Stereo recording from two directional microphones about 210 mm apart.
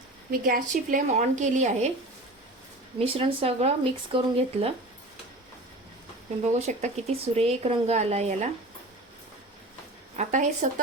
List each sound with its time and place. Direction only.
0.3 s speech: 45° right (ahead or behind)
3.0 s speech: 25° right (ahead or behind)
6.5 s speech: 35° right (ahead or behind)
10.2 s speech: 35° right (ahead or behind)